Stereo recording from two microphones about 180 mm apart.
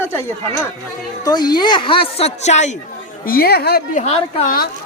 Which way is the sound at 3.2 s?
55° left (ahead or behind).